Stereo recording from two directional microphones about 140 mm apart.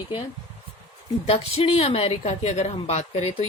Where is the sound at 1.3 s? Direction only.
45° left (ahead or behind).